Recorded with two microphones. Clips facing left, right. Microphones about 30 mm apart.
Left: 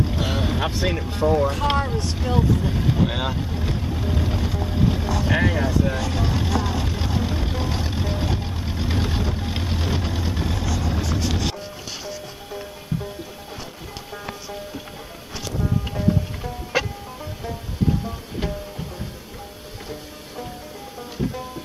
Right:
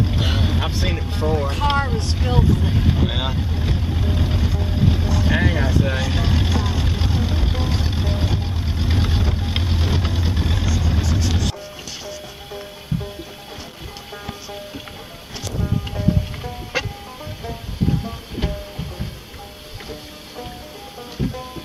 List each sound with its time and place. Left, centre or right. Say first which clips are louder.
0.0 s vehicle: right 1 dB; centre
0.6 s speech: left 1 dB; centre
1.8 s speech: right 2 dB; right
5.7 s vehicle: right 1 dB; right
11.0 s music: right 1 dB; centre
12.9 s music: right 2 dB; right
15.6 s music: even; centre
17.5 s music: right 1 dB; centre